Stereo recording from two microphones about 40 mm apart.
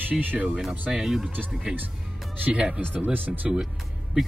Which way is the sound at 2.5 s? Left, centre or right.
Right.